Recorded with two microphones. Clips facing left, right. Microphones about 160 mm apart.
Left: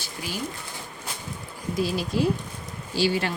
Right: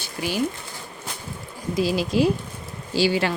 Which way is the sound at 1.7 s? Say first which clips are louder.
Right 4 dB; 90° right.